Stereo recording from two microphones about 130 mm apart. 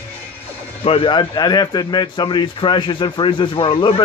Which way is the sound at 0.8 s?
45° left (ahead or behind).